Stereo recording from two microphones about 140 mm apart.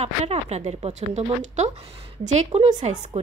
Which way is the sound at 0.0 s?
50° right (ahead or behind).